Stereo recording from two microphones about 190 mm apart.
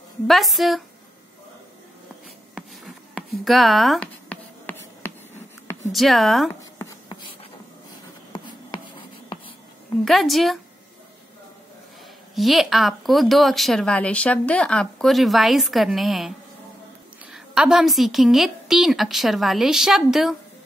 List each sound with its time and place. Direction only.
0.3 s speech: centre (ahead or behind)
2.5 s a sound: centre (ahead or behind)
5.9 s speech: centre (ahead or behind)
6.8 s a sound: 25° left (ahead or behind)
10.0 s speech: centre (ahead or behind)
12.4 s speech: centre (ahead or behind)